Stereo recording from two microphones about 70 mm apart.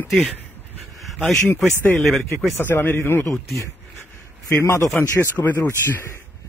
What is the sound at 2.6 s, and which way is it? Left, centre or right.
Speech, left.